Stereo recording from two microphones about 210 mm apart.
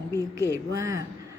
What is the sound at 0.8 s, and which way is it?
Speech, 15° right (ahead or behind).